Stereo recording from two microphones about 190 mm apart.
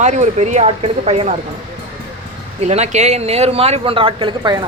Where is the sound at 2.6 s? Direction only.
35° right (ahead or behind).